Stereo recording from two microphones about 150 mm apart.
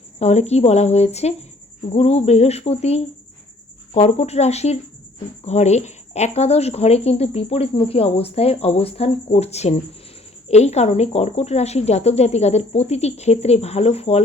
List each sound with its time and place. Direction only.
0.2 s speech: 45° left (ahead or behind)